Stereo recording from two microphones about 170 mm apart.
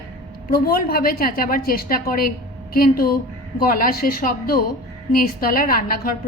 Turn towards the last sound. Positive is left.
turn(degrees=60)  # may be behind; listen again after turning